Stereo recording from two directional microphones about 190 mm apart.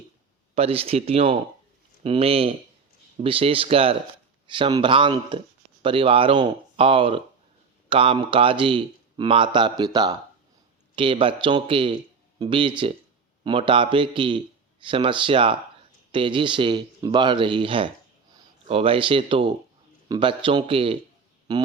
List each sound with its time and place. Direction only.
0.5 s a man's voice: 30° right (ahead or behind)